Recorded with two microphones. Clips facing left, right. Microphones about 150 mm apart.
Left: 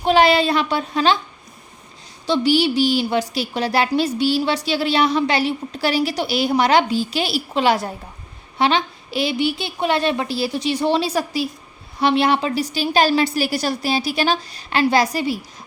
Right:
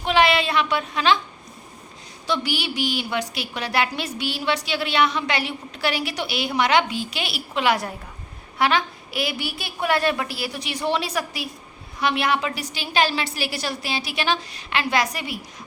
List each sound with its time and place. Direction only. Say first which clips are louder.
0.0 s a woman's voice: left 5 dB; 35° left (ahead or behind)
2.2 s a woman's voice: left 9 dB; 30° left (ahead or behind)